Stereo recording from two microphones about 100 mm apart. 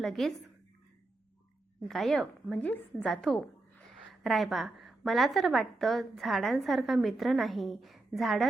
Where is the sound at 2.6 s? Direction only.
15° left (ahead or behind).